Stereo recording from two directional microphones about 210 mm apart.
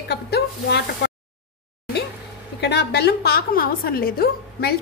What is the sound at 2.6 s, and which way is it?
A woman's voice, 50° left (ahead or behind).